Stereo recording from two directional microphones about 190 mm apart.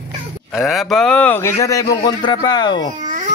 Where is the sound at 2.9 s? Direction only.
40° right (ahead or behind).